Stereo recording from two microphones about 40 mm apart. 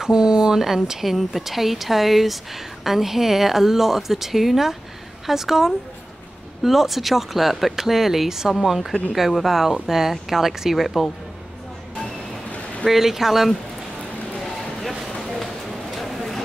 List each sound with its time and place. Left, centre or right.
0.0 s a woman's voice: centre
12.8 s speech: centre
14.4 s a sound: centre